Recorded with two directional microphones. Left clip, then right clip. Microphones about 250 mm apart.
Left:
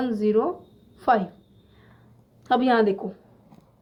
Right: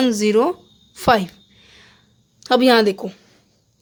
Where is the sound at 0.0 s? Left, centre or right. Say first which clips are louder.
Right 6 dB; right.